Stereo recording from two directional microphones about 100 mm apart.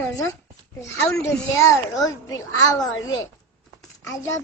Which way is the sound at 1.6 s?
30° left (ahead or behind).